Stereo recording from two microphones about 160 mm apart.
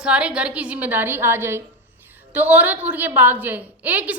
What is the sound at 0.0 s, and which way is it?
A woman's voice, 5° right (ahead or behind).